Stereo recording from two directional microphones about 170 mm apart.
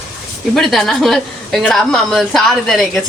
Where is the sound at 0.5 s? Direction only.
Centre (ahead or behind).